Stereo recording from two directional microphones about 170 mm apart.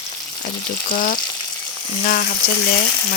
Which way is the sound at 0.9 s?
50° left (ahead or behind).